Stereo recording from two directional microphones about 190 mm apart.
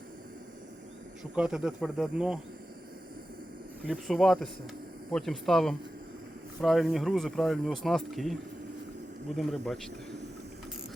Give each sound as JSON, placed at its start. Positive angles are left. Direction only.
{"t": 1.2, "sound": "speech", "side_deg": -5}
{"t": 3.8, "sound": "speech", "side_deg": 0}